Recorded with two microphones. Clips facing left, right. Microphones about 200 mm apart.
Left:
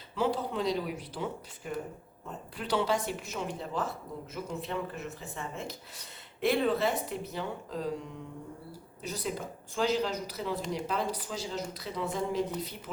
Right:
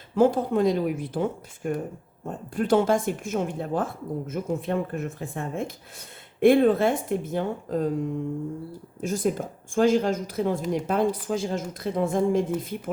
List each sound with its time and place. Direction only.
0.1 s speech: 50° right (ahead or behind)